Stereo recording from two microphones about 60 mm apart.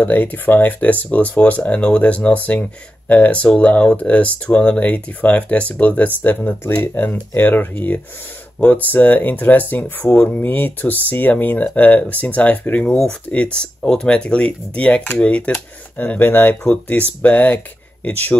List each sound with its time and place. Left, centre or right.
0.0 s speech: left
16.0 s speech: left
16.6 s speech: left